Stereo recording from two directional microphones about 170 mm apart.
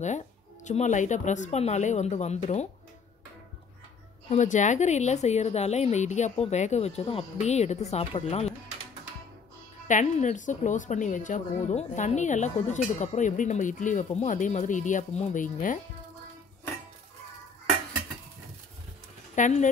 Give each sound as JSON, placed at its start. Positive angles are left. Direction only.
{"t": 0.7, "sound": "a woman's voice", "side_deg": 45}
{"t": 4.3, "sound": "a woman's voice", "side_deg": 45}
{"t": 9.8, "sound": "a woman's voice", "side_deg": 45}
{"t": 19.3, "sound": "speech", "side_deg": 45}